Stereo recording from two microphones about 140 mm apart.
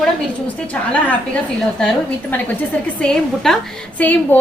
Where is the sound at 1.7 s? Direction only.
5° left (ahead or behind).